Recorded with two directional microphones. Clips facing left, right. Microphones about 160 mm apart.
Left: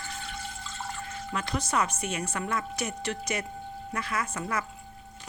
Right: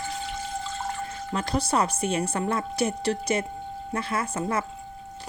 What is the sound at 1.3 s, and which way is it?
Speech, 30° right (ahead or behind).